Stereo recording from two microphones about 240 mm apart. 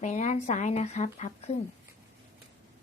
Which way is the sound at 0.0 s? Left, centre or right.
Left.